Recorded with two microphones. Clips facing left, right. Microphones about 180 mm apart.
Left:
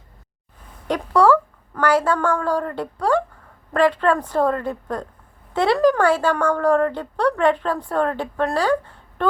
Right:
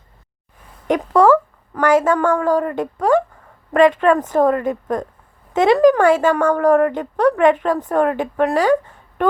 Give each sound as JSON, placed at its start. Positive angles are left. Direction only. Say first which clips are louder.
{"t": 0.9, "sound": "a woman's voice", "louder": "right 3 dB", "side_deg": -20}